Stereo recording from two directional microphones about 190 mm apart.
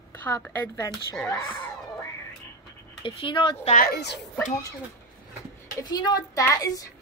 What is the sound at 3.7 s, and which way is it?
Speech, 55° left (ahead or behind).